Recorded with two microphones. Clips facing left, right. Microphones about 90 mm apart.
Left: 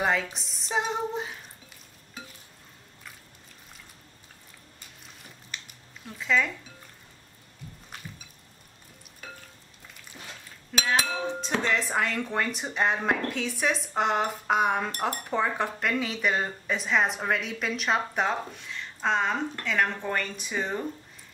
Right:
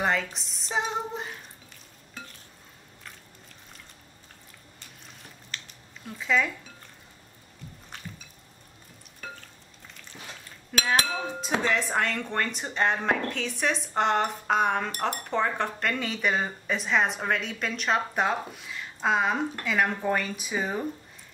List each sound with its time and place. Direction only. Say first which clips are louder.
0.0 s a sound: even; centre (ahead or behind)
4.7 s biting: right 1 dB; 5° left (ahead or behind)
6.0 s speech: even; centre (ahead or behind)
7.9 s squish: right 1 dB; 5° left (ahead or behind)
10.9 s speech: even; 5° right (ahead or behind)